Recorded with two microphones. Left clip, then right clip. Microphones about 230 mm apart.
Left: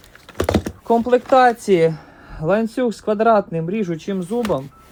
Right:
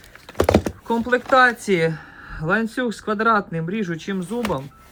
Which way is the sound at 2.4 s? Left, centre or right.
Centre.